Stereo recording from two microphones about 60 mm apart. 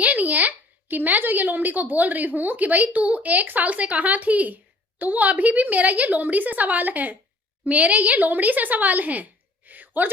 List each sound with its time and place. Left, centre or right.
0.0 s a woman's voice: right